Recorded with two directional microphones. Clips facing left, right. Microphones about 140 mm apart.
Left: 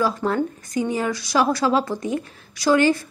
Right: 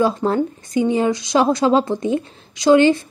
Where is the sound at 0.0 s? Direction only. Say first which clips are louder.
Right 4 dB; 25° right (ahead or behind).